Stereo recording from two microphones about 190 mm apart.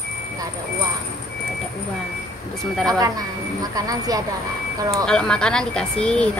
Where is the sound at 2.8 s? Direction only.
20° right (ahead or behind).